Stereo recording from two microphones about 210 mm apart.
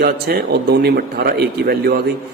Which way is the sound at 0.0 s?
50° right (ahead or behind).